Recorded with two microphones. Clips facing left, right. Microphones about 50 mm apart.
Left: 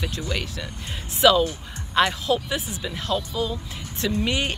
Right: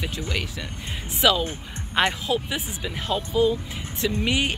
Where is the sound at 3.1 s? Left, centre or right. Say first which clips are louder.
Right 7 dB; right.